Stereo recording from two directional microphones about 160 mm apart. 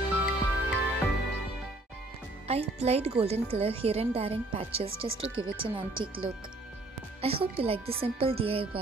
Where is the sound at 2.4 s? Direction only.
40° right (ahead or behind).